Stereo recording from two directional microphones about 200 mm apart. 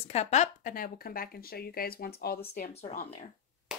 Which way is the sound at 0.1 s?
35° left (ahead or behind).